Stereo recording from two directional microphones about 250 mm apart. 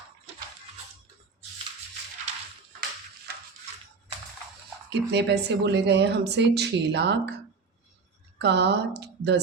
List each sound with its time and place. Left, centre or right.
4.9 s speech: right
8.4 s a woman's voice: right